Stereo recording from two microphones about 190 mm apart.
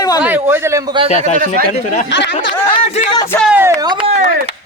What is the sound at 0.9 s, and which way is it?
Speech, 30° right (ahead or behind).